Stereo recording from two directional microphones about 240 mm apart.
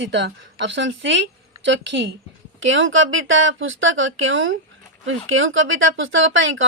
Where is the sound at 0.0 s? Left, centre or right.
Right.